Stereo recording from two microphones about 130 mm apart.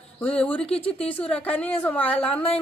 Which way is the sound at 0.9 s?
10° left (ahead or behind).